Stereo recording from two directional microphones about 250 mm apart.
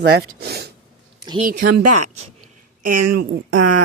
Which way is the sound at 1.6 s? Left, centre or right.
Right.